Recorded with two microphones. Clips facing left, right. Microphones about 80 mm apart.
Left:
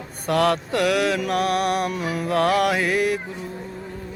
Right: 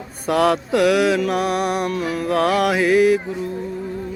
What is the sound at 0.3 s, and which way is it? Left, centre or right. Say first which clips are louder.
Mantra: right 3 dB; centre.